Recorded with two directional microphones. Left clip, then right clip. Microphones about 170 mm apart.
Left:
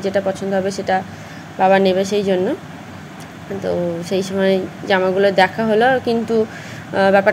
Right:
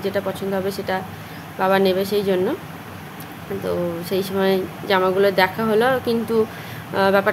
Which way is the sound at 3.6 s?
10° left (ahead or behind).